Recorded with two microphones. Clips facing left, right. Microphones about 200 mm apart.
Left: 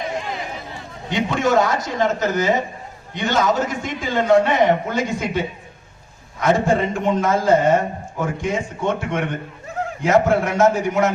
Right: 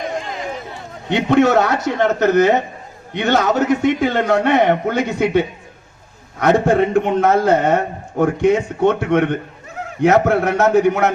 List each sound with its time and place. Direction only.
1.1 s a man's voice: 65° right (ahead or behind)